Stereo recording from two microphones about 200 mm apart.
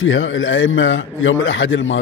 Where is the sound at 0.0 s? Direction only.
70° left (ahead or behind).